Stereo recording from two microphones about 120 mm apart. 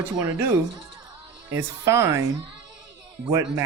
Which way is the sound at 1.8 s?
25° right (ahead or behind).